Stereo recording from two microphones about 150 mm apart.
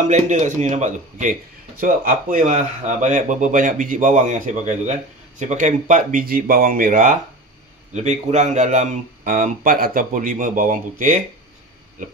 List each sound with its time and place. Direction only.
0.0 s speech: 55° right (ahead or behind)
1.8 s speech: 65° right (ahead or behind)
8.3 s speech: 50° right (ahead or behind)